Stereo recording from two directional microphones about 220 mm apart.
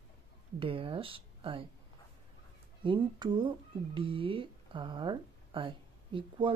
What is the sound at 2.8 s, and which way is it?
Speech, 20° right (ahead or behind).